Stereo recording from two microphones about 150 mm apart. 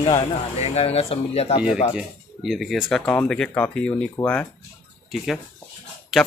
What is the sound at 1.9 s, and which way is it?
Speech, centre (ahead or behind).